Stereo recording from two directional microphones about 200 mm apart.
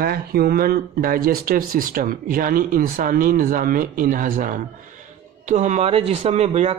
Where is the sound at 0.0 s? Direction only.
50° right (ahead or behind).